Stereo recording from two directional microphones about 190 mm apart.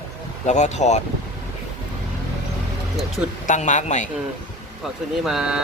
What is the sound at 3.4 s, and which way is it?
Speech, 40° left (ahead or behind).